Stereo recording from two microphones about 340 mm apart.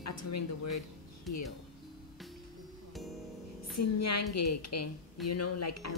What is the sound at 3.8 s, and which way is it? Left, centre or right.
Speech, left.